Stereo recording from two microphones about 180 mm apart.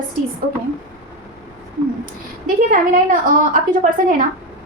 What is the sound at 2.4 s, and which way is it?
A woman's voice, 50° right (ahead or behind).